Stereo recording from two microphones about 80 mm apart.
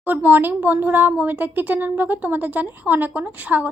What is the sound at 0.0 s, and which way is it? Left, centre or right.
Speech, right.